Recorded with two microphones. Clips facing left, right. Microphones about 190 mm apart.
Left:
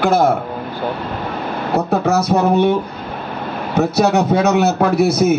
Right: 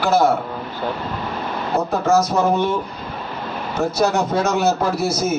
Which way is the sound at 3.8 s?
65° left (ahead or behind).